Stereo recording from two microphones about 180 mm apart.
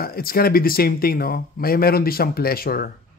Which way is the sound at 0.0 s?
55° left (ahead or behind).